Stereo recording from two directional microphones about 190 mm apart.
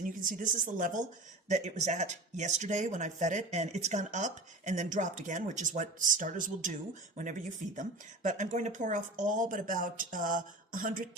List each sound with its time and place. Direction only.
0.0 s a woman's voice: 45° right (ahead or behind)
7.8 s a woman's voice: 40° right (ahead or behind)